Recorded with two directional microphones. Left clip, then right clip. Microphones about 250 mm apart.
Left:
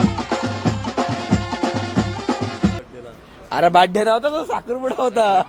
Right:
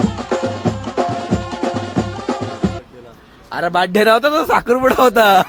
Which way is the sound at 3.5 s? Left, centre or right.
Centre.